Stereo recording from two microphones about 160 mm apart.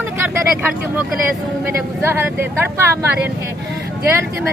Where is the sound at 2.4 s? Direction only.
15° right (ahead or behind).